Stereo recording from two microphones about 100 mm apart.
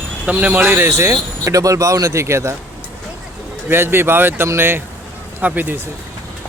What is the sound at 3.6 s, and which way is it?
Speech, 25° right (ahead or behind).